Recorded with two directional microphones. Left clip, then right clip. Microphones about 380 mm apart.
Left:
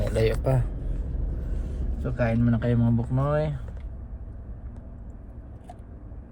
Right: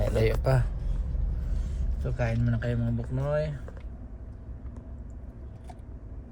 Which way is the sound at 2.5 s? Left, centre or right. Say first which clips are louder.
Left 6 dB; left.